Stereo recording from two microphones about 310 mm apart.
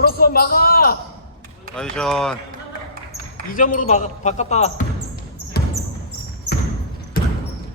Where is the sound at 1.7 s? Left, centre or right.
Centre.